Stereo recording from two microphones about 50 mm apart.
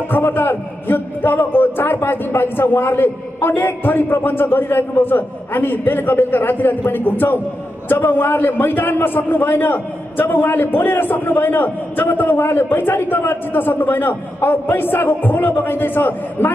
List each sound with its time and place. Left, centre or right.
0.1 s a man's voice: left